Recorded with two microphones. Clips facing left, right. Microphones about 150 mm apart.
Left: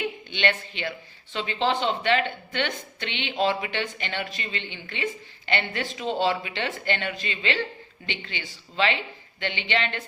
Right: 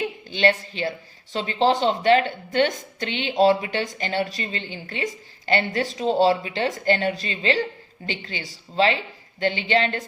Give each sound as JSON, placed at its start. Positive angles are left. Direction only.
{"t": 0.0, "sound": "speech", "side_deg": -35}